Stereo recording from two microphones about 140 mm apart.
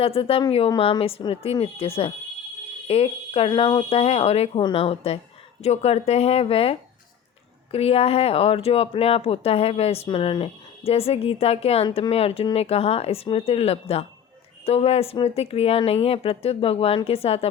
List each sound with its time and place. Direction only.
0.0 s speech: 40° left (ahead or behind)